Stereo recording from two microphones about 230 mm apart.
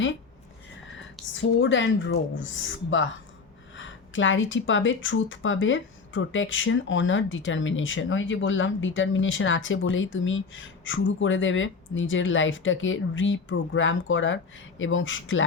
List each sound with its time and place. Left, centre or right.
1.4 s a woman's voice: left
3.8 s speech: left